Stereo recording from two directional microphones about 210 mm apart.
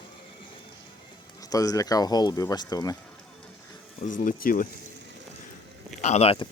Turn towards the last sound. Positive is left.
turn(degrees=30)  # may be behind; listen again after turning